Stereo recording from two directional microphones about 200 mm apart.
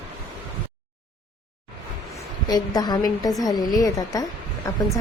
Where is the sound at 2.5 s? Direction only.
20° left (ahead or behind).